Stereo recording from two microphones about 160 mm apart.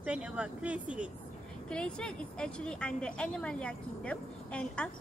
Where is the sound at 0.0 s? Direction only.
5° right (ahead or behind).